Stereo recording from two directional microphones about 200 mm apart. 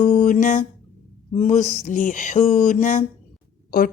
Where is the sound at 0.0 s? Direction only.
40° left (ahead or behind).